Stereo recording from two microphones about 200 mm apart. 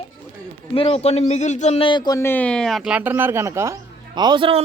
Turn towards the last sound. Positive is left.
turn(degrees=-25)  # may be behind; listen again after turning